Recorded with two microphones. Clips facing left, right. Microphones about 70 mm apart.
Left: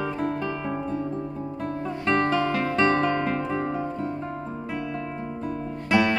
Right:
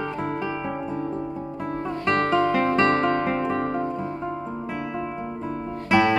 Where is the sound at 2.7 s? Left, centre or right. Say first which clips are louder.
Right 2 dB; centre.